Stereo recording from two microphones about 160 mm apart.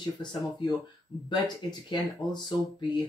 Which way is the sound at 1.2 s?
25° left (ahead or behind).